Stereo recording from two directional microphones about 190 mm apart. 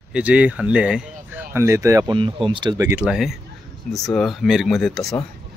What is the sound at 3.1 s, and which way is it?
Speech, centre (ahead or behind).